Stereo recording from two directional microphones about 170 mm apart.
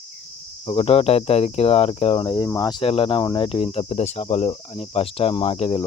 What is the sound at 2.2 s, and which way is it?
Speech, 25° left (ahead or behind).